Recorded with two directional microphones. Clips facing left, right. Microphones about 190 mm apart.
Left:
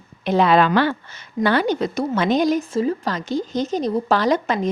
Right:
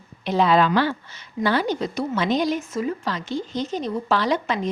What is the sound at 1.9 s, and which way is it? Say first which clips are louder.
Speech: left 2 dB; 50° left (ahead or behind).